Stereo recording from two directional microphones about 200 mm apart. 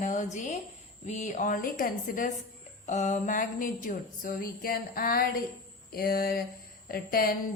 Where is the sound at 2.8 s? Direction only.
35° left (ahead or behind).